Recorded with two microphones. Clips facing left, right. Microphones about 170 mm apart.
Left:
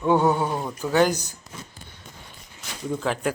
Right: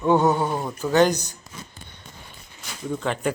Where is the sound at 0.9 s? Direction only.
10° left (ahead or behind).